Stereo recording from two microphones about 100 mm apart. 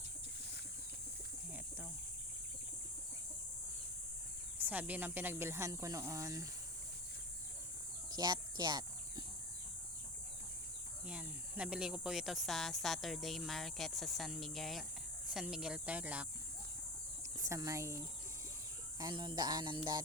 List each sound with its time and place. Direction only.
4.5 s speech: 15° right (ahead or behind); by 6.5 s 35° right (ahead or behind)
8.1 s a sound: 45° right (ahead or behind)
11.0 s speech: 10° right (ahead or behind)
17.4 s speech: 35° right (ahead or behind)
18.9 s speech: 45° right (ahead or behind)